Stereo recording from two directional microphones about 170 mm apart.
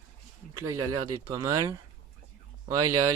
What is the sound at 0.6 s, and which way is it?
Speech, 20° right (ahead or behind).